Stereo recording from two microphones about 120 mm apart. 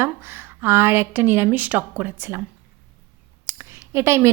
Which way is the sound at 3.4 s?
20° right (ahead or behind).